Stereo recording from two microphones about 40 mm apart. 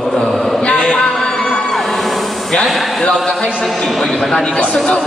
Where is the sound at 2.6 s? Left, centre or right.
Centre.